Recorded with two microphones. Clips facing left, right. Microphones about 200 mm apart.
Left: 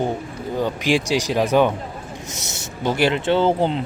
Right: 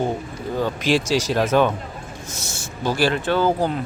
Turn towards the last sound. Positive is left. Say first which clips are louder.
# left 2 dB
turn(degrees=25)  # may be behind; listen again after turning